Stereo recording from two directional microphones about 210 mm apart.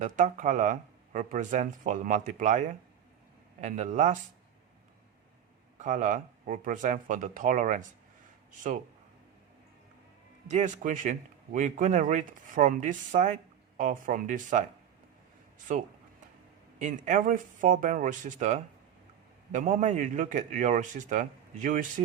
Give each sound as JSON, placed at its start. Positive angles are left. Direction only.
{"t": 0.0, "sound": "speech", "side_deg": -35}
{"t": 5.8, "sound": "speech", "side_deg": -35}
{"t": 10.5, "sound": "speech", "side_deg": -35}